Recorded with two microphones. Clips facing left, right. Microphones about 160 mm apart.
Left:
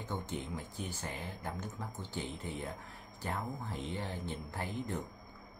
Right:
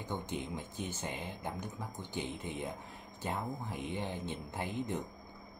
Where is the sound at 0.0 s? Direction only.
15° right (ahead or behind).